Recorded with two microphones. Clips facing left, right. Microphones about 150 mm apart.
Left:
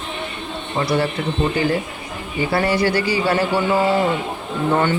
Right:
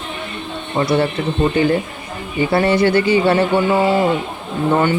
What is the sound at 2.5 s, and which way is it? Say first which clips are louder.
Speech: right 4 dB; 25° right (ahead or behind).